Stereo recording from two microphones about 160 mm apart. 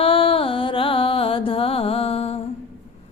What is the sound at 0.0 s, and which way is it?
Music, 35° left (ahead or behind).